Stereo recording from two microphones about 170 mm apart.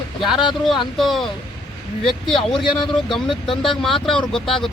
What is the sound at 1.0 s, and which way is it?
Speech, centre (ahead or behind).